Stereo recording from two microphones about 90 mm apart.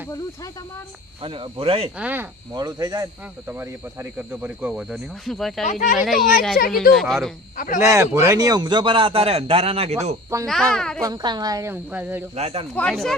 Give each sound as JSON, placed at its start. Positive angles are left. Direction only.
{"t": 1.2, "sound": "speech", "side_deg": -85}
{"t": 2.0, "sound": "speech", "side_deg": -20}
{"t": 2.6, "sound": "a woman's voice", "side_deg": -45}
{"t": 4.2, "sound": "speech", "side_deg": -20}
{"t": 4.7, "sound": "speech", "side_deg": -5}
{"t": 7.8, "sound": "speech", "side_deg": -30}
{"t": 8.4, "sound": "a man's voice", "side_deg": -45}
{"t": 10.4, "sound": "speech", "side_deg": 5}
{"t": 11.0, "sound": "a woman's voice", "side_deg": -50}
{"t": 11.6, "sound": "speech", "side_deg": -20}
{"t": 12.7, "sound": "speech", "side_deg": 10}